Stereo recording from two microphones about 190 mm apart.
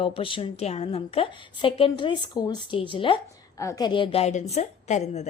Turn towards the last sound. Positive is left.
turn(degrees=35)  # may be behind; listen again after turning